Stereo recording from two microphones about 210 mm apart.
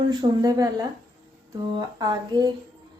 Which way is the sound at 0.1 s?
20° right (ahead or behind).